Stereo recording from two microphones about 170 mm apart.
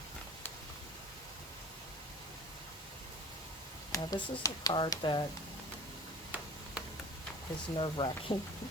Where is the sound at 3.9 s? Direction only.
20° left (ahead or behind).